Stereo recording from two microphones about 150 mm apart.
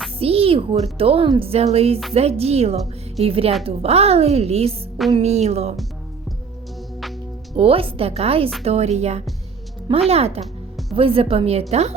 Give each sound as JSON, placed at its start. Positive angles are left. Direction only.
{"t": 0.2, "sound": "a child's voice", "side_deg": -40}
{"t": 7.5, "sound": "a woman's voice", "side_deg": -40}
{"t": 10.4, "sound": "music", "side_deg": 0}
{"t": 10.9, "sound": "a woman's voice", "side_deg": -40}